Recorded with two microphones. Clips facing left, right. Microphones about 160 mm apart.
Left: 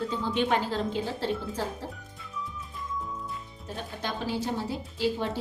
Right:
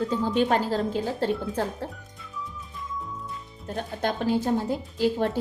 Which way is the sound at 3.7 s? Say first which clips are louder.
Right 6 dB; 50° right (ahead or behind).